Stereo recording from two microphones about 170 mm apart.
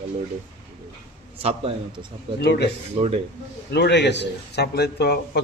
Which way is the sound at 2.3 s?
75° left (ahead or behind).